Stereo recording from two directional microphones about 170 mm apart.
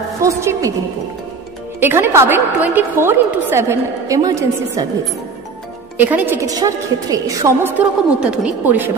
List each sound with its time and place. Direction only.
0.2 s a woman's voice: 15° right (ahead or behind)
1.8 s a woman's voice: 15° right (ahead or behind)
5.9 s a woman's voice: 10° right (ahead or behind)
8.2 s a woman's voice: 5° right (ahead or behind)